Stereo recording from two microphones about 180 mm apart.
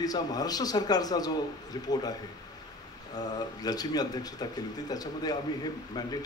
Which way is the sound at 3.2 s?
20° left (ahead or behind).